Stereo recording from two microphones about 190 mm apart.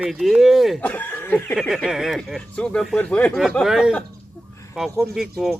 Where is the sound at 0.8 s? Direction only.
10° left (ahead or behind).